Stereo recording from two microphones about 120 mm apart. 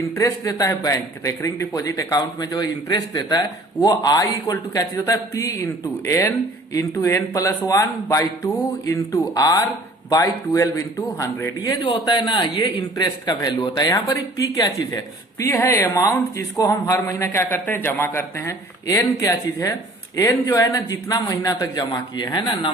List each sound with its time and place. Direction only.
0.2 s a man's voice: 25° left (ahead or behind)
11.7 s a man's voice: 40° left (ahead or behind)